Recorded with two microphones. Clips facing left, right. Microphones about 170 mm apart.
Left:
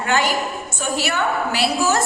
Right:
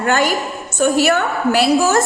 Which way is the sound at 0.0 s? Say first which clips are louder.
Right 3 dB; 50° right (ahead or behind).